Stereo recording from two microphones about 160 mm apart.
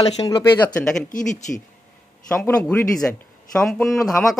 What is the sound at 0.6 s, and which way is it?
Speech, 10° left (ahead or behind).